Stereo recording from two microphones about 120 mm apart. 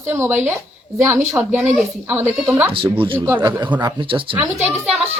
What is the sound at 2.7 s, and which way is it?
Speech, 45° right (ahead or behind).